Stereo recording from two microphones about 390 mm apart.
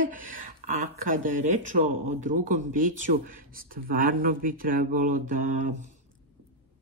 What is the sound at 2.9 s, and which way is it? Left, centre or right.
Speech, right.